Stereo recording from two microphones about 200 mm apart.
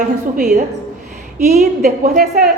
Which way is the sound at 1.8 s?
40° right (ahead or behind).